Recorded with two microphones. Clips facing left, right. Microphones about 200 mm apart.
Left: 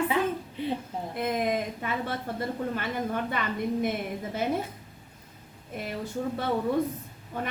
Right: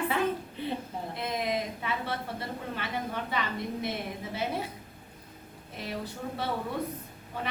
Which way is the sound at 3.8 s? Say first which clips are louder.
Left 5 dB; 50° left (ahead or behind).